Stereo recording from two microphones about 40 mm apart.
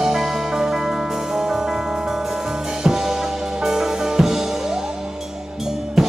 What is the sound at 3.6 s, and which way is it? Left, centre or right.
Music, centre.